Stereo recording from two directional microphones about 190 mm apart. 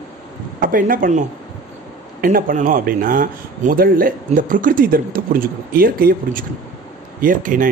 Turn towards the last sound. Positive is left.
turn(degrees=-45)  # may be behind; listen again after turning